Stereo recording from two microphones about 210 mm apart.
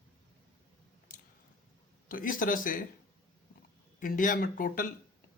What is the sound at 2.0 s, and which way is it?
Speech, 40° left (ahead or behind).